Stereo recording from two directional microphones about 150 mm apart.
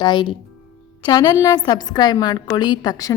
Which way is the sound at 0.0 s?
30° left (ahead or behind).